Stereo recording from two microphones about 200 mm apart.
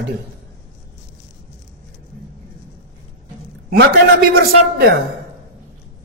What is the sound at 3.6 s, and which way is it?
Speech, 55° right (ahead or behind).